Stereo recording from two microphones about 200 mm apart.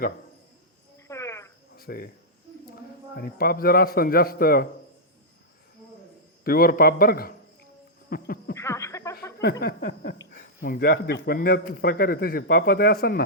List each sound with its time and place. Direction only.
1.0 s cricket: 15° left (ahead or behind)
1.7 s cricket: 50° left (ahead or behind)
3.2 s a man's voice: 50° left (ahead or behind)
6.4 s a man's voice: 45° left (ahead or behind)
8.1 s a sound: 45° left (ahead or behind)
8.5 s a sound: 15° left (ahead or behind)
9.4 s a man's voice: 50° left (ahead or behind)